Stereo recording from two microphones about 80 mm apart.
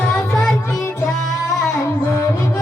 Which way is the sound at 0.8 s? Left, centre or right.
Left.